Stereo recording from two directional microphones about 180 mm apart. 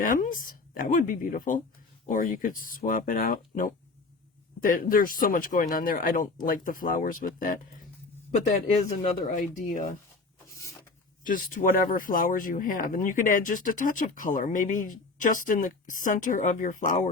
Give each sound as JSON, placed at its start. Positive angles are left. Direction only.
{"t": 0.0, "sound": "speech", "side_deg": 50}
{"t": 9.3, "sound": "speech", "side_deg": 45}
{"t": 10.6, "sound": "a sound", "side_deg": 15}
{"t": 11.3, "sound": "speech", "side_deg": 50}